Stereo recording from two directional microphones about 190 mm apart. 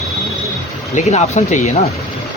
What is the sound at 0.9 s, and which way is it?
Speech, 35° left (ahead or behind).